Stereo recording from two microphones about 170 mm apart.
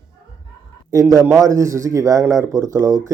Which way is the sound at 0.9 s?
20° right (ahead or behind).